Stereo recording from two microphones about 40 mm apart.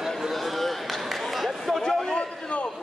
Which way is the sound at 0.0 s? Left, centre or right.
Centre.